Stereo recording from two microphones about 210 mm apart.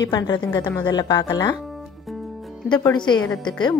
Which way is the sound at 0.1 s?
20° left (ahead or behind).